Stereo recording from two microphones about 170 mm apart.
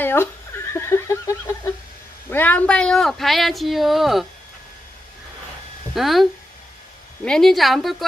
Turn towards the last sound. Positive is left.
turn(degrees=0)  # may be behind; listen again after turning